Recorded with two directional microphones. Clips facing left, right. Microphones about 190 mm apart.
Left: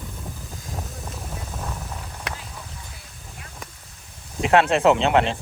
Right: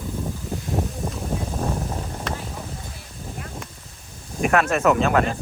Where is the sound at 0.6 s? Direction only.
25° right (ahead or behind).